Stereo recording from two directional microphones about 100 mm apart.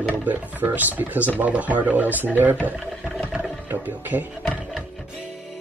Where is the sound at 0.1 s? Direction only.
15° right (ahead or behind).